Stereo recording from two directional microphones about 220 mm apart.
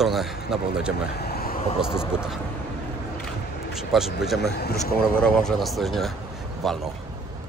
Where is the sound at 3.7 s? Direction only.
Centre (ahead or behind).